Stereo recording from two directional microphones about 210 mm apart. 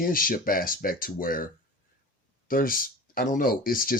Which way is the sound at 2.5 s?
40° left (ahead or behind).